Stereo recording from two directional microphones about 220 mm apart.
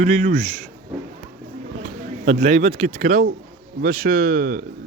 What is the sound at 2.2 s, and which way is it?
Speech, 30° right (ahead or behind).